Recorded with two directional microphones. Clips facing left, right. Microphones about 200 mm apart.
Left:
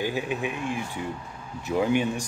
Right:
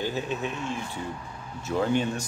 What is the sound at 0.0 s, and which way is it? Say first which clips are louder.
Speech: left 2 dB; 10° left (ahead or behind).